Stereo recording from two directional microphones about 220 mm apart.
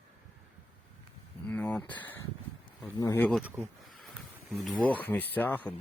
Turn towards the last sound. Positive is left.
turn(degrees=10)  # may be behind; listen again after turning